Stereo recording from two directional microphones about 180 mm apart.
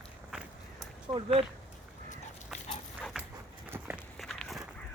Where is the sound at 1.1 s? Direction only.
30° right (ahead or behind).